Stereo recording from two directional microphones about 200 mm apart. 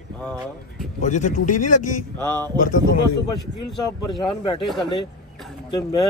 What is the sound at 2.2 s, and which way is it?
Speech, 10° left (ahead or behind).